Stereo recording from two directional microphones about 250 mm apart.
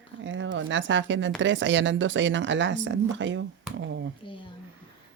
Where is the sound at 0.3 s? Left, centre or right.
Right.